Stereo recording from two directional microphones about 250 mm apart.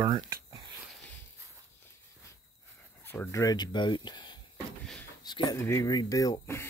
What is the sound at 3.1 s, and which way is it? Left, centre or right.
Speech, centre.